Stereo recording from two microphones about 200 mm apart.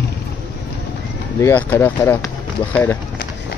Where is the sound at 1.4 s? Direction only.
10° left (ahead or behind).